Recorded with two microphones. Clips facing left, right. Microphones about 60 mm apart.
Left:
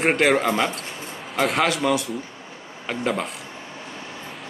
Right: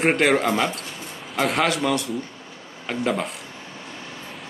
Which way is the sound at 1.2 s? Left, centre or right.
Centre.